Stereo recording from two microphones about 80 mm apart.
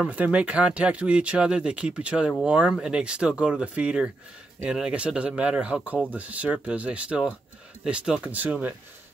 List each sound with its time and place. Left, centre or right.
0.0 s speech: centre